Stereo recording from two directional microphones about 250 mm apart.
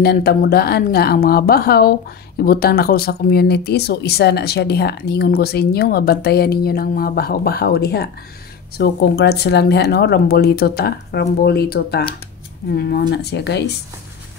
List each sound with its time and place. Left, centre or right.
0.0 s speech: left